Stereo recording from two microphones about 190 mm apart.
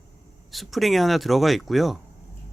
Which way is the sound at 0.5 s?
Centre (ahead or behind).